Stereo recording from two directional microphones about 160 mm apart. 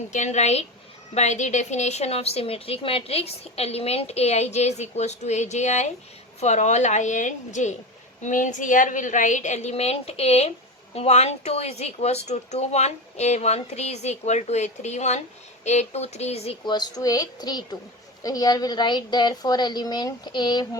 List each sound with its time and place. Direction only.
0.1 s a woman's voice: 45° left (ahead or behind)
16.6 s a woman's voice: 25° left (ahead or behind)